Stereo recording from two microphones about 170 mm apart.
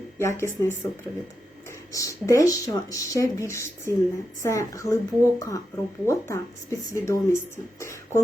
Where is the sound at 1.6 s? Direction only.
20° left (ahead or behind).